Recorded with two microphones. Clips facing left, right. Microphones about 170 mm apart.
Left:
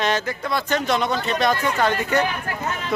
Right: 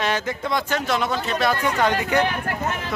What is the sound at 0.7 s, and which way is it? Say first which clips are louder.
Speech: left 5 dB; 5° right (ahead or behind).